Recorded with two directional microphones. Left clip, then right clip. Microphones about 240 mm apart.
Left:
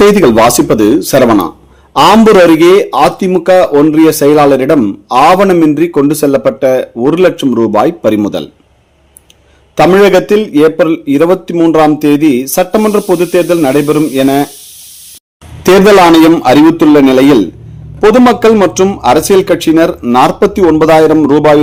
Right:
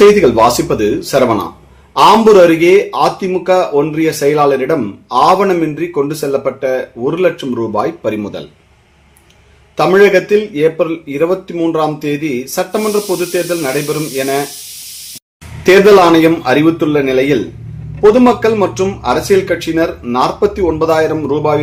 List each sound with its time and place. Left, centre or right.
0.0 s speech: left
2.6 s speech: left
9.7 s speech: left
15.6 s speech: left